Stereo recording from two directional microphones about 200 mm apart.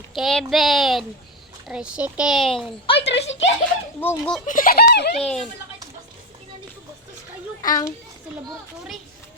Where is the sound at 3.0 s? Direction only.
65° left (ahead or behind).